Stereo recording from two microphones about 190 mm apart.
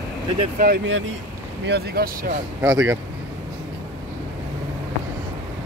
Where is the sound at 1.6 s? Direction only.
60° right (ahead or behind).